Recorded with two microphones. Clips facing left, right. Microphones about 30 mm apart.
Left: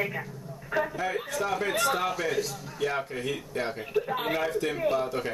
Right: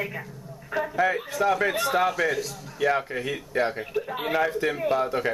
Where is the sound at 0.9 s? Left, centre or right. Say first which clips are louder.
Right 7 dB; centre.